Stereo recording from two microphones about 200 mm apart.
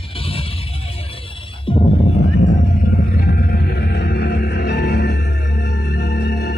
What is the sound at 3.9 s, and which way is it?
Music, 55° left (ahead or behind).